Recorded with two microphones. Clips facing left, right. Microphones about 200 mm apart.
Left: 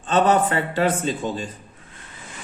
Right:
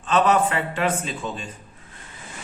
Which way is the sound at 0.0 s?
30° left (ahead or behind).